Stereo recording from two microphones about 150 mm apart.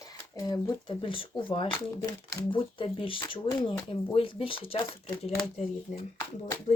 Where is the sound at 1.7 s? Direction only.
25° left (ahead or behind).